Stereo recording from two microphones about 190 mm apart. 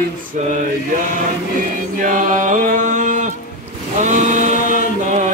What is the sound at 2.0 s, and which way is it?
Chant, 45° right (ahead or behind).